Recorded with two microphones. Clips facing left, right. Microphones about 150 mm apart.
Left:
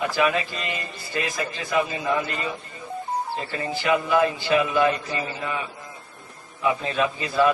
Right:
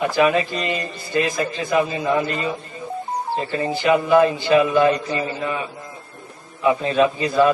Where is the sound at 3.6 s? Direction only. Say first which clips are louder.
Right 4 dB; 30° right (ahead or behind).